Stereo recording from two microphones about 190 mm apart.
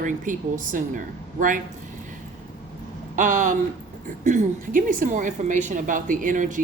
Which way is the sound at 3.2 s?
45° right (ahead or behind).